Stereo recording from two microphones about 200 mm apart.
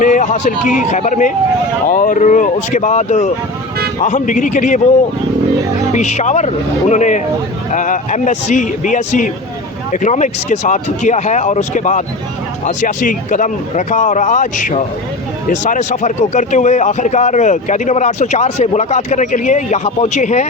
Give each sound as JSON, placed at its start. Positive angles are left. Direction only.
{"t": 0.0, "sound": "a man's voice", "side_deg": 40}
{"t": 5.9, "sound": "a man's voice", "side_deg": 35}